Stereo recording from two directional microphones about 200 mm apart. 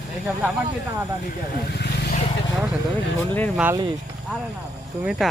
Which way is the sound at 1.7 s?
55° left (ahead or behind).